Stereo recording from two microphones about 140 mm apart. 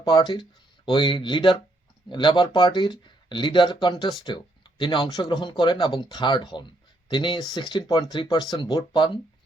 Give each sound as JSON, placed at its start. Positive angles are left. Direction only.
{"t": 0.0, "sound": "speech", "side_deg": 30}